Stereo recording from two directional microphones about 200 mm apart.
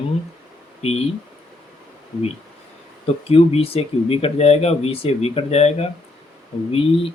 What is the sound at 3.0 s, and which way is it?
Speech, 30° left (ahead or behind).